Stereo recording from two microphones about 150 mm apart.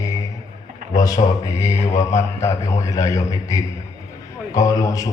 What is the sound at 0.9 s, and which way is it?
A man's voice, 25° left (ahead or behind).